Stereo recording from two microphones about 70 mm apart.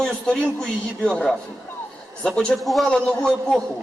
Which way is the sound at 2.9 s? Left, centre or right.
Centre.